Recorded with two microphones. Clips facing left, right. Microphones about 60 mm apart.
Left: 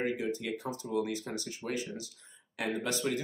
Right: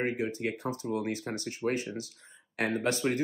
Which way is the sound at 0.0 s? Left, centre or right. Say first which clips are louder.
Right 2 dB; right.